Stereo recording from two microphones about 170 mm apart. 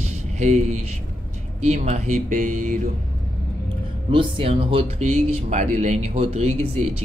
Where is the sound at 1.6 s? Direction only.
40° right (ahead or behind).